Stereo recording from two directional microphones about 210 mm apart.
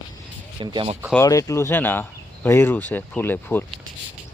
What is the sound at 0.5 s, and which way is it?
Speech, 20° right (ahead or behind).